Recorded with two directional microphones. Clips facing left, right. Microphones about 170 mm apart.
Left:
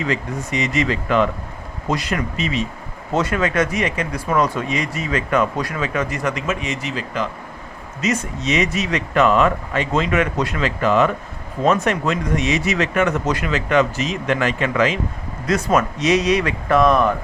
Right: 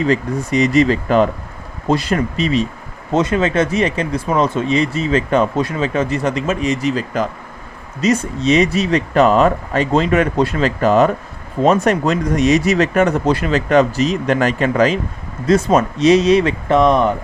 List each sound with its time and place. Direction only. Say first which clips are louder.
0.0 s speech: right 6 dB; 35° right (ahead or behind)
3.1 s speech: right 4 dB; 20° right (ahead or behind)